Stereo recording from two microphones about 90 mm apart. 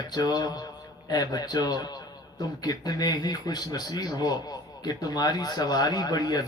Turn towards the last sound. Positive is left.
turn(degrees=45)  # may be behind; listen again after turning